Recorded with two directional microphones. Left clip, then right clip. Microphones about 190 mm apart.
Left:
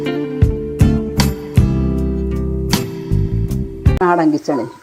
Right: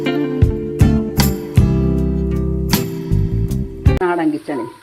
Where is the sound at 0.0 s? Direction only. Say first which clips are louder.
Right 1 dB; centre (ahead or behind).